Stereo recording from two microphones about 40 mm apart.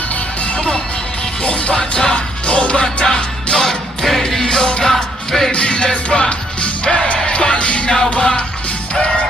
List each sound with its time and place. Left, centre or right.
0.5 s music: centre
1.5 s music: left
1.8 s music: centre
2.8 s music: centre
4.8 s music: centre
5.5 s music: left
7.9 s music: centre